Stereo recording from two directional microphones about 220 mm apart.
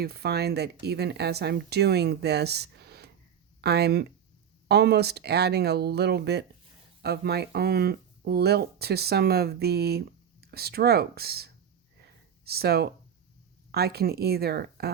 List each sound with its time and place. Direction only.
0.0 s speech: 45° right (ahead or behind)